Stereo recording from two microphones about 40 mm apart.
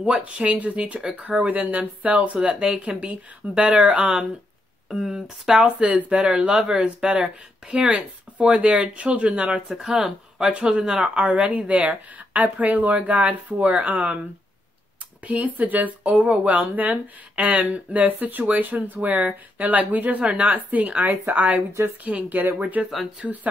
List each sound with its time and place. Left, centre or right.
0.2 s speech: right
4.9 s speech: centre; by 9.6 s right
9.7 s speech: centre
10.5 s speech: right
15.2 s speech: right
23.2 s speech: centre